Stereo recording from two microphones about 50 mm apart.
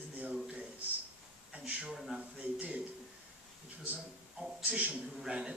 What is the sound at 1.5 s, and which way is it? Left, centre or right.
Speech, right.